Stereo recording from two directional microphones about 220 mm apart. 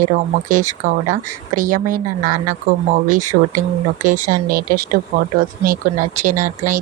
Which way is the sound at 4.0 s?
40° right (ahead or behind).